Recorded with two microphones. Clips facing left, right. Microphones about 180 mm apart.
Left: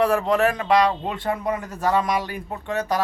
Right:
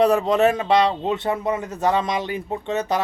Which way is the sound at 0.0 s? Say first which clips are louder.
Right 3 dB; 20° right (ahead or behind).